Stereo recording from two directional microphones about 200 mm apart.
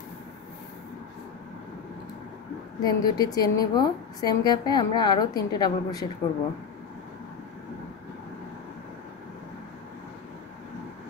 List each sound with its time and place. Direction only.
2.8 s a woman's voice: 20° left (ahead or behind)